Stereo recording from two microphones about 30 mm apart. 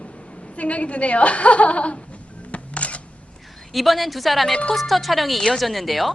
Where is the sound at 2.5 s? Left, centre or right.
Left.